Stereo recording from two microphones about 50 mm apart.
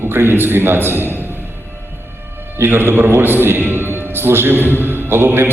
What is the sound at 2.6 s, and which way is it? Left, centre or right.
Speech, right.